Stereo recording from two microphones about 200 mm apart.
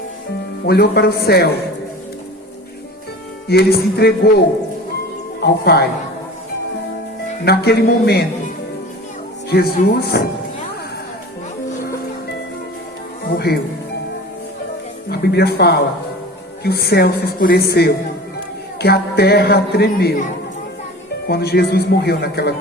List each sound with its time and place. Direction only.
0.6 s a man's voice: 50° left (ahead or behind)
3.5 s a man's voice: 50° left (ahead or behind)
7.4 s a man's voice: 50° left (ahead or behind)
9.5 s a man's voice: 50° left (ahead or behind)
13.2 s a man's voice: 55° left (ahead or behind)
15.1 s a man's voice: 55° left (ahead or behind)
21.2 s a man's voice: 50° left (ahead or behind)